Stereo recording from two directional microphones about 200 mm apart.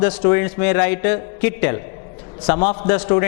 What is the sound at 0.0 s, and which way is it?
A man's voice, 10° left (ahead or behind).